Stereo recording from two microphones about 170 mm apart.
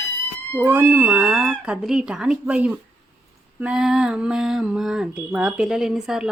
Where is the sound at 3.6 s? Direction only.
5° right (ahead or behind).